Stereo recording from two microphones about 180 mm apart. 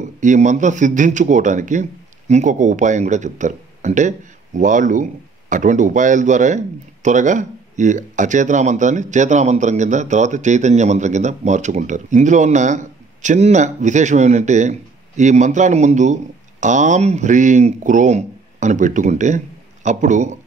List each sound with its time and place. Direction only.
0.2 s speech: 45° right (ahead or behind)